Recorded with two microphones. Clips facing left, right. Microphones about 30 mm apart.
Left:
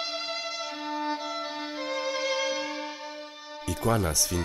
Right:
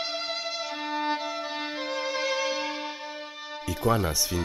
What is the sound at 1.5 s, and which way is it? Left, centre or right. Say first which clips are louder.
Music: right 2 dB; centre.